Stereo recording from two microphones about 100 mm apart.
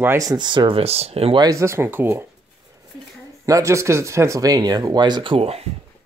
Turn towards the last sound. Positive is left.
turn(degrees=-50)  # may be behind; listen again after turning